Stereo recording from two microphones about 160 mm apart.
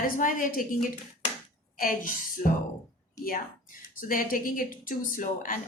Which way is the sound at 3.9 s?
60° left (ahead or behind).